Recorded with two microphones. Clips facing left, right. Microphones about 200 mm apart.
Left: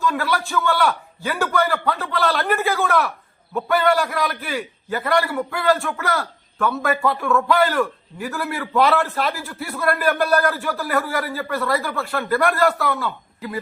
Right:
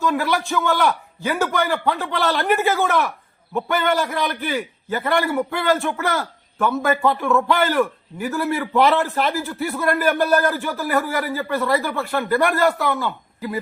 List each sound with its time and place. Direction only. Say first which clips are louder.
0.1 s a man's voice: right 2 dB; 15° right (ahead or behind)